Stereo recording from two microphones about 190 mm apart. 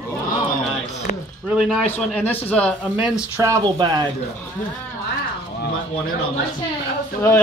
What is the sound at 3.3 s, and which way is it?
Speech, 20° right (ahead or behind).